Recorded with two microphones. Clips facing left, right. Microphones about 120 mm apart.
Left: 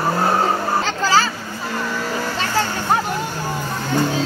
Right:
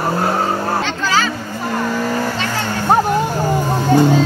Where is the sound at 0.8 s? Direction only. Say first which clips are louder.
Even; 40° left (ahead or behind).